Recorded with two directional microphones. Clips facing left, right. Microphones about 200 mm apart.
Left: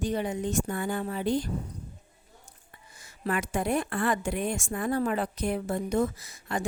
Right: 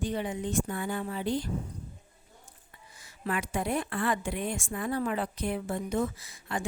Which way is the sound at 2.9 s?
45° left (ahead or behind).